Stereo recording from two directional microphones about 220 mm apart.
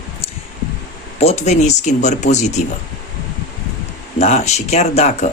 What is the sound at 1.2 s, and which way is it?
Speech, 30° left (ahead or behind).